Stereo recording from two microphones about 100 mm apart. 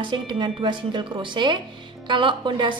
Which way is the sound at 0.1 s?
50° right (ahead or behind).